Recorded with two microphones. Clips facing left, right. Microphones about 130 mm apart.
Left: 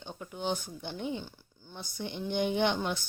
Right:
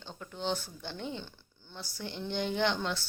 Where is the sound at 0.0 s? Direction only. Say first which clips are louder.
Left 1 dB; 15° left (ahead or behind).